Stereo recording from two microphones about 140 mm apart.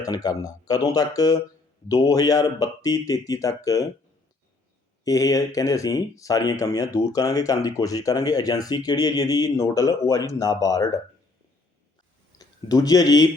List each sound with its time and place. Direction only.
0.0 s speech: 25° left (ahead or behind)
5.0 s speech: 25° left (ahead or behind)
12.4 s speech: 25° left (ahead or behind)